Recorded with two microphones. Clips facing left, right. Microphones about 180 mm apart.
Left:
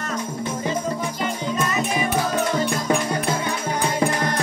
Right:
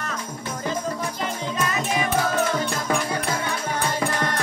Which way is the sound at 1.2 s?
Centre (ahead or behind).